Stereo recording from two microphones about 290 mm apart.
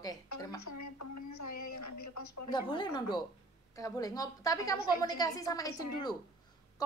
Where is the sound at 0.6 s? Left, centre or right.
Left.